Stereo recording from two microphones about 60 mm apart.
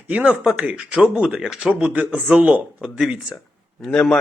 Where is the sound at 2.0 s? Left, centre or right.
Right.